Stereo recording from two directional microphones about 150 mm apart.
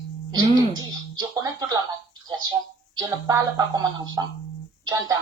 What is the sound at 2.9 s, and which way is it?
A woman's voice, 25° right (ahead or behind).